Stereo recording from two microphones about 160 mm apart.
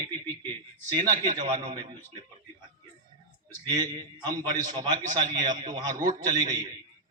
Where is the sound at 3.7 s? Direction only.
25° right (ahead or behind).